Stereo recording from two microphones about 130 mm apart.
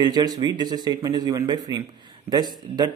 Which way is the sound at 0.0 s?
30° right (ahead or behind).